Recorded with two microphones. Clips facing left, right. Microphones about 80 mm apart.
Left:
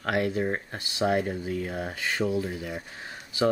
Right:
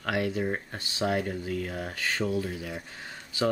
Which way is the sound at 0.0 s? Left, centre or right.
Centre.